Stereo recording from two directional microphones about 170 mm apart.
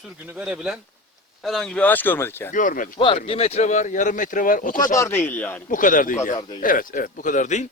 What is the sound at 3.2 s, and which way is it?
Speech, 35° left (ahead or behind).